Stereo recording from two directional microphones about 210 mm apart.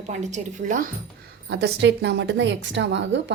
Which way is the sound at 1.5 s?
55° right (ahead or behind).